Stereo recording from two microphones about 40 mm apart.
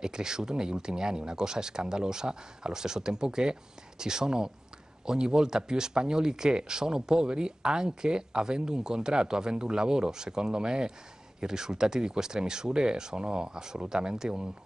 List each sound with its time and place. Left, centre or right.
0.0 s speech: centre